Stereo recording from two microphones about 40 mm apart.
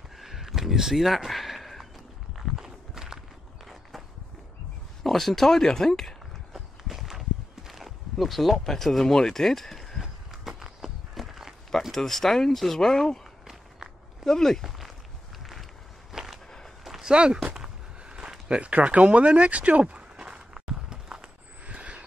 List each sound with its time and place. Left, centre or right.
0.2 s a sound: centre
2.5 s walk: centre
5.0 s speech: centre
6.5 s walk: centre
8.6 s speech: centre
10.6 s walk: centre
11.9 s speech: centre
14.2 s speech: centre
15.3 s a sound: centre
17.0 s speech: right
18.0 s a sound: right